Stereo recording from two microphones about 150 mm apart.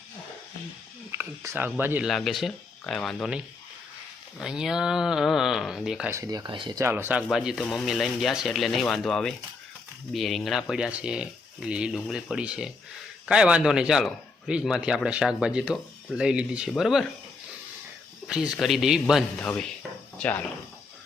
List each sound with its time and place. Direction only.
1.2 s speech: 15° right (ahead or behind)
2.0 s speech: centre (ahead or behind)
6.1 s speech: 20° right (ahead or behind)
6.8 s speech: 15° right (ahead or behind)
18.3 s speech: 5° right (ahead or behind)
19.4 s rub: 5° left (ahead or behind)
20.1 s speech: 10° left (ahead or behind)